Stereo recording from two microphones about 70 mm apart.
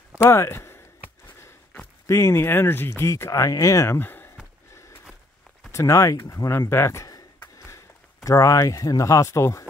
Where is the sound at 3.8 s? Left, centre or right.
Left.